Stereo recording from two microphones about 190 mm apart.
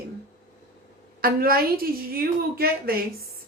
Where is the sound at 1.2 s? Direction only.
50° right (ahead or behind).